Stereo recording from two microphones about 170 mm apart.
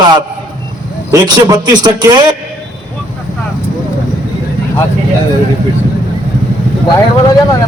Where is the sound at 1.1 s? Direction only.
20° right (ahead or behind).